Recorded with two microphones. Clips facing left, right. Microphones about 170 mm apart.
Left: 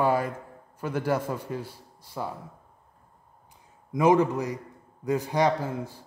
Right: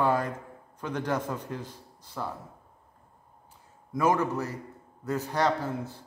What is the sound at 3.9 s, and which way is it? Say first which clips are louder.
A man's voice: left 5 dB; 20° left (ahead or behind).